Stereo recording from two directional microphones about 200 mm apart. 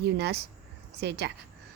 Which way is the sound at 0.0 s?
55° right (ahead or behind).